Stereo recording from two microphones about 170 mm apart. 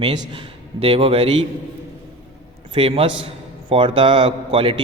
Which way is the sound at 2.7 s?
35° right (ahead or behind).